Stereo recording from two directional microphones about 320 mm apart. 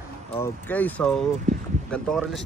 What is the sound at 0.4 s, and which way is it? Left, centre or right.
Speech, centre.